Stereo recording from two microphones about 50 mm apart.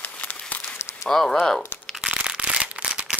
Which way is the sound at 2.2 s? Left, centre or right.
Right.